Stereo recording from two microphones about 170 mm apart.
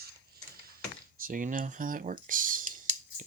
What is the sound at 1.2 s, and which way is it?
Speech, 50° right (ahead or behind).